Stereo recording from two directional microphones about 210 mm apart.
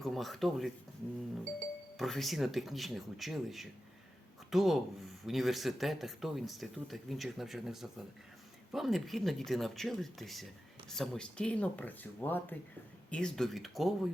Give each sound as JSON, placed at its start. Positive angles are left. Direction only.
{"t": 0.0, "sound": "speech", "side_deg": 0}